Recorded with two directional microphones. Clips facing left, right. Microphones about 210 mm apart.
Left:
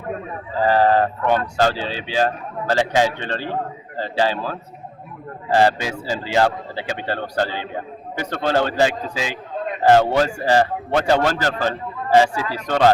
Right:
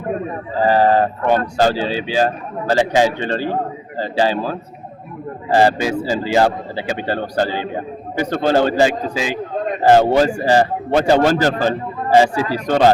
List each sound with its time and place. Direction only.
0.6 s a man's voice: 10° right (ahead or behind)
1.2 s speech: 45° right (ahead or behind)
1.5 s a man's voice: 10° right (ahead or behind)
8.9 s speech: 40° right (ahead or behind)
9.8 s a man's voice: 10° right (ahead or behind)
12.3 s speech: 40° right (ahead or behind)
12.6 s a man's voice: 15° right (ahead or behind)